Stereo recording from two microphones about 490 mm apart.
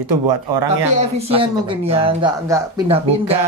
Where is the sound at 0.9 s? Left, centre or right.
Centre.